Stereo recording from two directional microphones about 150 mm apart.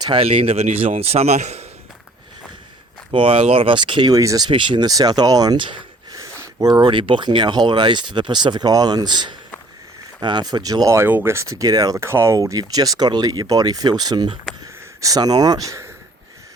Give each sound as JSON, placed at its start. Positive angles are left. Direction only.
{"t": 0.0, "sound": "speech", "side_deg": -35}
{"t": 3.1, "sound": "speech", "side_deg": -40}
{"t": 14.6, "sound": "a sound", "side_deg": -25}